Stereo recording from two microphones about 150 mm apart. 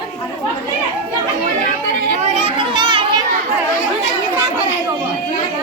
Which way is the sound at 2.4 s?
35° right (ahead or behind).